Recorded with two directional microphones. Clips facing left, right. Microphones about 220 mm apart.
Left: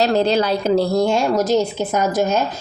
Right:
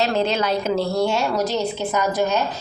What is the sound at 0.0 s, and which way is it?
A woman's voice, 35° left (ahead or behind).